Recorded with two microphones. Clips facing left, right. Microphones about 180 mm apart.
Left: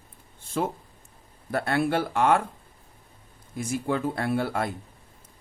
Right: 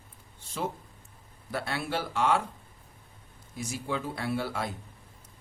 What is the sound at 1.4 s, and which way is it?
Speech, 55° left (ahead or behind).